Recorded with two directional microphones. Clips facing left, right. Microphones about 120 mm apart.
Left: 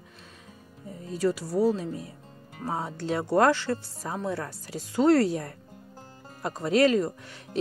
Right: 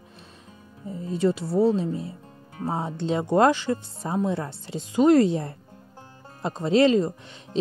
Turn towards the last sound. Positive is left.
turn(degrees=-25)  # may be behind; listen again after turning